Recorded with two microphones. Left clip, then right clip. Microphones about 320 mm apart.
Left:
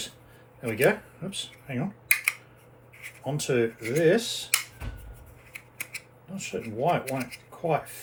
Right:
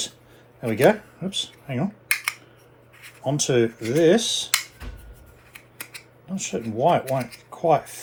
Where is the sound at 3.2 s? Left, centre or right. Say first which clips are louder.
Right 5 dB; right.